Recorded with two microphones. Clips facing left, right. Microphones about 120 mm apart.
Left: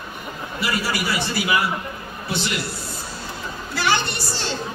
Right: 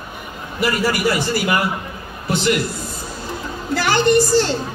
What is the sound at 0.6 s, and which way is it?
A man's voice, 45° right (ahead or behind).